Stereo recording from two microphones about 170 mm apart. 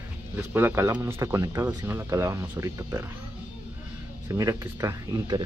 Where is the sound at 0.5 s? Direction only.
15° right (ahead or behind).